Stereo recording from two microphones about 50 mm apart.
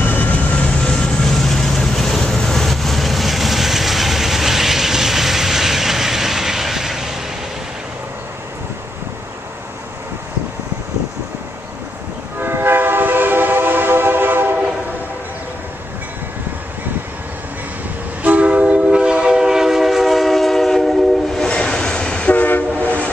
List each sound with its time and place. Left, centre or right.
0.0 s vehicle: left
0.8 s vehicle: centre
12.4 s train: right
18.2 s train: right; by 21.5 s centre
21.5 s train: centre
22.3 s train: left